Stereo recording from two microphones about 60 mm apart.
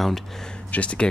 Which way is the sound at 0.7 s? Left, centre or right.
Left.